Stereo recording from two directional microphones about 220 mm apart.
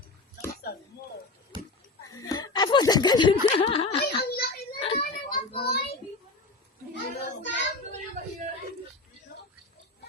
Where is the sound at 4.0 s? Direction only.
45° left (ahead or behind).